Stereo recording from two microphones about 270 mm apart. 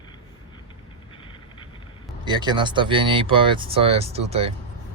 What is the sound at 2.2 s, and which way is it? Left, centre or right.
Speech, centre.